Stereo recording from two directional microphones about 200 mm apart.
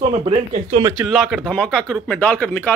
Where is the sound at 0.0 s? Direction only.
30° right (ahead or behind).